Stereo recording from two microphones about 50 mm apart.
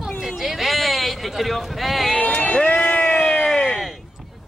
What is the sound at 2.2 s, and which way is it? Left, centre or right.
Speech, left.